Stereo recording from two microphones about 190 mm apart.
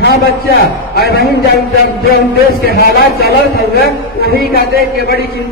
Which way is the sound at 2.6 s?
55° left (ahead or behind).